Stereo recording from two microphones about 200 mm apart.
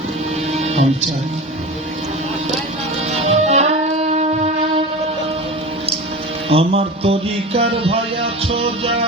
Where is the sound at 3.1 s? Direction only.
35° right (ahead or behind).